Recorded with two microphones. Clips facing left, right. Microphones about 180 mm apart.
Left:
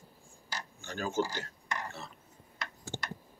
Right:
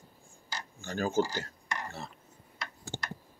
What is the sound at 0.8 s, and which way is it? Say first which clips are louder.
Speech: right 4 dB; 40° right (ahead or behind).